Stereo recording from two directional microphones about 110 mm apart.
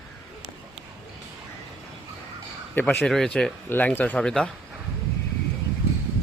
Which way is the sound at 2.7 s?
15° left (ahead or behind).